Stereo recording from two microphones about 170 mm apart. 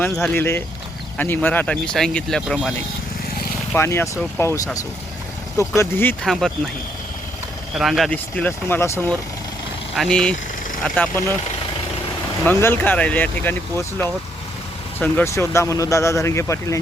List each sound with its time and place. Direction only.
0.0 s speech: 10° left (ahead or behind)
3.8 s speech: 15° left (ahead or behind)
6.2 s speech: centre (ahead or behind)
7.8 s speech: centre (ahead or behind)
12.6 s speech: 10° left (ahead or behind)